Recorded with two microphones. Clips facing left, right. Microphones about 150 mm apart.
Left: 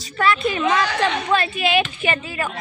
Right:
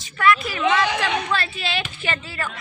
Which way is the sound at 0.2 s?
25° left (ahead or behind).